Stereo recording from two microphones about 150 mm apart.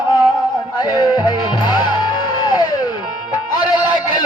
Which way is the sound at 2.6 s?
25° left (ahead or behind).